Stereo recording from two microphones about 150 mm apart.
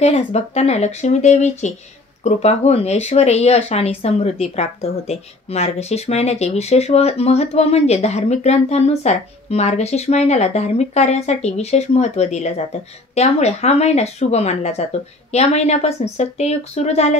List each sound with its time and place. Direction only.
0.0 s speech: 45° left (ahead or behind)